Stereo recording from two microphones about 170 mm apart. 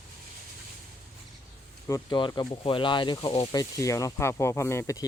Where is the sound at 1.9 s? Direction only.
25° left (ahead or behind).